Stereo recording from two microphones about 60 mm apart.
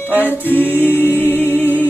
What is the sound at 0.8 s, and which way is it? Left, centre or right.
Music, left.